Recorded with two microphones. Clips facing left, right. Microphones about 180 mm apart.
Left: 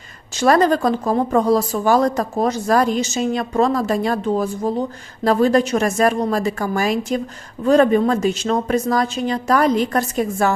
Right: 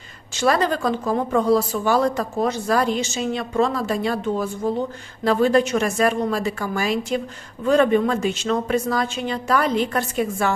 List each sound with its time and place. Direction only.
0.3 s speech: 45° left (ahead or behind)